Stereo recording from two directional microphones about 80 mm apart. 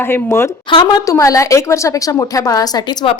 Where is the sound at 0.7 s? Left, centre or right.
Left.